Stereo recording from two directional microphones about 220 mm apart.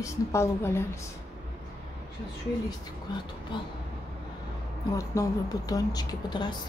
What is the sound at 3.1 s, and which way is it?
Speech, 20° left (ahead or behind).